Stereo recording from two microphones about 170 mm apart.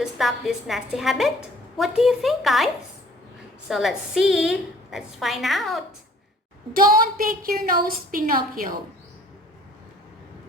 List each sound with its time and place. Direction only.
0.0 s a woman's voice: centre (ahead or behind)
3.7 s a woman's voice: centre (ahead or behind)
6.7 s a woman's voice: 55° right (ahead or behind)